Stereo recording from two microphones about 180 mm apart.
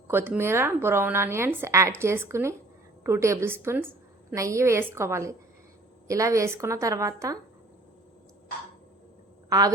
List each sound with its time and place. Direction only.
0.1 s a woman's voice: 10° right (ahead or behind)
9.5 s a woman's voice: 20° right (ahead or behind)